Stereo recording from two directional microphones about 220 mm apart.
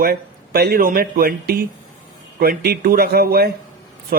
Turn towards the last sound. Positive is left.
turn(degrees=-45)  # may be behind; listen again after turning